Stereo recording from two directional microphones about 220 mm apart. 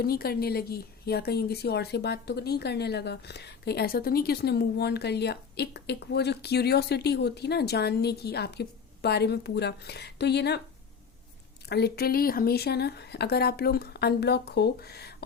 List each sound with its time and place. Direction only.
0.0 s a woman's voice: 45° left (ahead or behind)
11.7 s a woman's voice: 45° left (ahead or behind)